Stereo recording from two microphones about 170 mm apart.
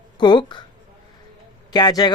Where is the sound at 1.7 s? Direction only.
25° left (ahead or behind).